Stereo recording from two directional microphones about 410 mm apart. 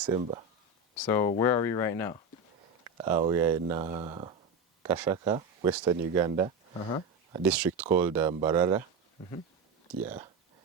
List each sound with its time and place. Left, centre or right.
0.0 s speech: centre
1.0 s speech: centre
3.0 s speech: centre
9.9 s speech: centre